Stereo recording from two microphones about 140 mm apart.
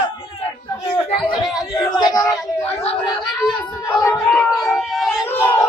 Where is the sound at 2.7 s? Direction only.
45° left (ahead or behind).